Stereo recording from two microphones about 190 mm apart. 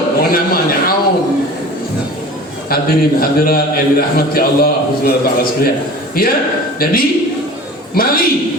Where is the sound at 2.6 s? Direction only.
50° left (ahead or behind).